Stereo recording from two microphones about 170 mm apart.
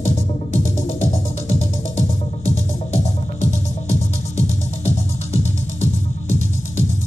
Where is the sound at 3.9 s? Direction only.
40° left (ahead or behind).